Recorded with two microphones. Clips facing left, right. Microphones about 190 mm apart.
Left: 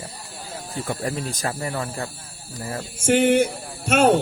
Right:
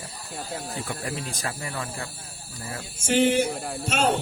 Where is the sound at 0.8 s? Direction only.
45° left (ahead or behind).